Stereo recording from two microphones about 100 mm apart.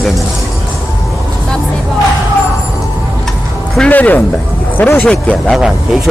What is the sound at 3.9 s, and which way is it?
Speech, 15° left (ahead or behind).